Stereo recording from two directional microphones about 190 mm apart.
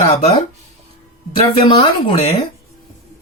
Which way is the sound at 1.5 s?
25° left (ahead or behind).